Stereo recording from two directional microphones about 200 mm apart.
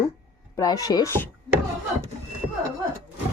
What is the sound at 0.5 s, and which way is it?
Speech, 20° left (ahead or behind).